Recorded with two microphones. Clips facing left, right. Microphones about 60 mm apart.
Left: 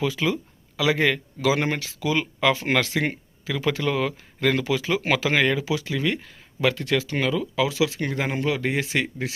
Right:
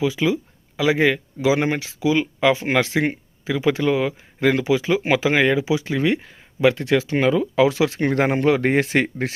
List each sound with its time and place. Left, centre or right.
0.0 s speech: centre
5.8 s speech: right